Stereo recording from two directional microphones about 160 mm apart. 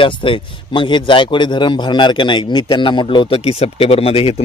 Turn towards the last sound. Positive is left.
turn(degrees=35)  # may be behind; listen again after turning